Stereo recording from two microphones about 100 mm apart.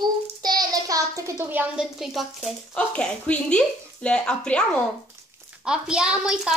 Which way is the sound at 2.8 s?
10° left (ahead or behind).